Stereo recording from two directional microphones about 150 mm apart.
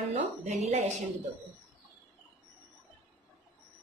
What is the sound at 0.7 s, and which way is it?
Speech, 45° right (ahead or behind).